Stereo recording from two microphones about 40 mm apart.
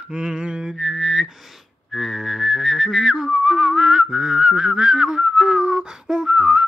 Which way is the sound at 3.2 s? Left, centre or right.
Centre.